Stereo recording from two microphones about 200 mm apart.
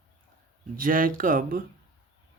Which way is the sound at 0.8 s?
45° right (ahead or behind).